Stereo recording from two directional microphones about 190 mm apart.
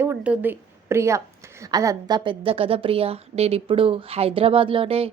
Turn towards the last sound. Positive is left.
turn(degrees=-30)  # may be behind; listen again after turning